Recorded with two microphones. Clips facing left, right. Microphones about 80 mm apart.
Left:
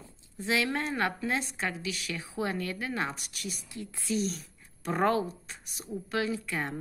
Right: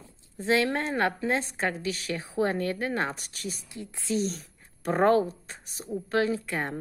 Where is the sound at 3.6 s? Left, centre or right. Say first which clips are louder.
Right 2 dB; right.